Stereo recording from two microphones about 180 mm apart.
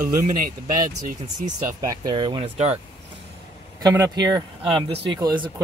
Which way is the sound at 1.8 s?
20° right (ahead or behind).